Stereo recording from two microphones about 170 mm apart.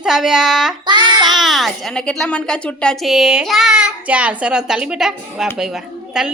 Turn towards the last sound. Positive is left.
turn(degrees=-5)  # may be behind; listen again after turning